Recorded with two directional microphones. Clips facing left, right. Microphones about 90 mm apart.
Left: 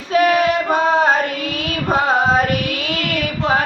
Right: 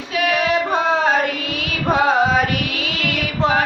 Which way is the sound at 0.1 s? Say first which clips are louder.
Left 4 dB; 40° left (ahead or behind).